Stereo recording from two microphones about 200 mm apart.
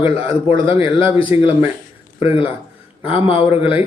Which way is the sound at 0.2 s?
10° right (ahead or behind).